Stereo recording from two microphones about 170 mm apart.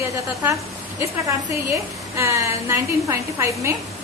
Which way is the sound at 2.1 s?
15° right (ahead or behind).